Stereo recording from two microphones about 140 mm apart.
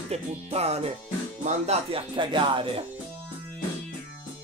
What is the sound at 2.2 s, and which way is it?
Speech, 35° right (ahead or behind).